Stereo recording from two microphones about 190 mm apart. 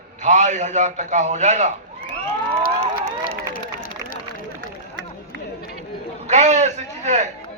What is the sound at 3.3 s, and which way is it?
Run, 50° left (ahead or behind).